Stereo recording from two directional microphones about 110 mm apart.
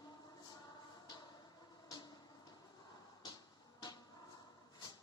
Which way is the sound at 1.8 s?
35° left (ahead or behind).